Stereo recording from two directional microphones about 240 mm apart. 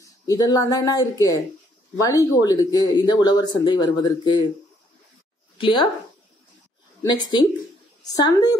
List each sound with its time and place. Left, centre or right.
0.3 s speech: centre
5.6 s speech: left
7.0 s speech: centre